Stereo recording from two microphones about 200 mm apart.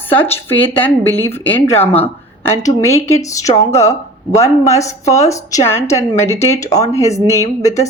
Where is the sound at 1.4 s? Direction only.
10° left (ahead or behind).